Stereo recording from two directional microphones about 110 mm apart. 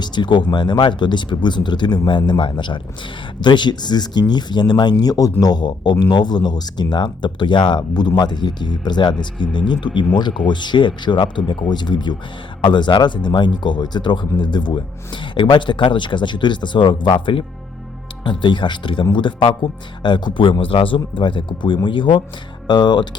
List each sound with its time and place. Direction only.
0.0 s speech: 45° left (ahead or behind)